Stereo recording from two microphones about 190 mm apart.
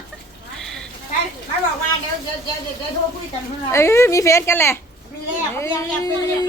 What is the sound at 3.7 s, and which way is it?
A woman's voice, 15° left (ahead or behind).